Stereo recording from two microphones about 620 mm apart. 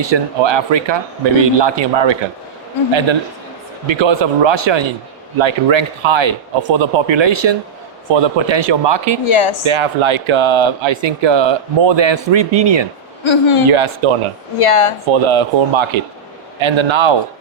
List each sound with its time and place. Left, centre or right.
0.0 s speech: right
3.8 s speech: right
9.2 s speech: left
9.6 s speech: right
13.2 s speech: left
13.7 s speech: right
14.6 s speech: left
15.0 s speech: right